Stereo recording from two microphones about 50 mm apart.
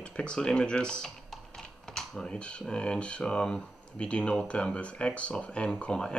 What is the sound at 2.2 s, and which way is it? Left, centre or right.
Speech, centre.